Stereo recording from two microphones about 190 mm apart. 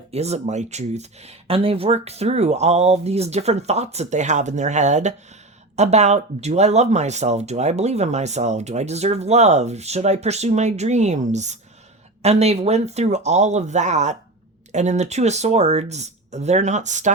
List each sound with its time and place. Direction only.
0.1 s speech: 35° right (ahead or behind)